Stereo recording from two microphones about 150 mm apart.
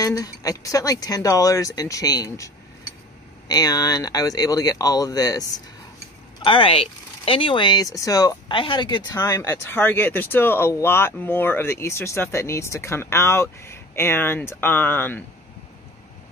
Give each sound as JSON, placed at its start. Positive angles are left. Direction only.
{"t": 0.0, "sound": "speech", "side_deg": 25}
{"t": 6.4, "sound": "speech", "side_deg": 35}